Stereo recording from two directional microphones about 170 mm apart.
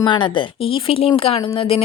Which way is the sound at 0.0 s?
25° left (ahead or behind).